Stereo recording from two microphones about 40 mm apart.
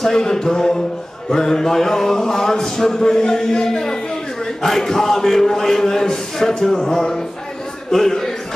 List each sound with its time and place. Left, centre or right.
0.0 s a man's voice: centre